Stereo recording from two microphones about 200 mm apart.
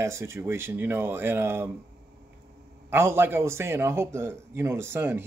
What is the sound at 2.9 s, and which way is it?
A man's voice, 10° right (ahead or behind).